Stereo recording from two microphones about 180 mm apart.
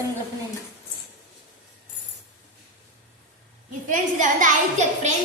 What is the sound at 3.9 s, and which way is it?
A woman's voice, 45° right (ahead or behind).